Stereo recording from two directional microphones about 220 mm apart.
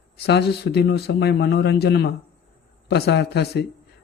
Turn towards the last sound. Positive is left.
turn(degrees=50)  # may be behind; listen again after turning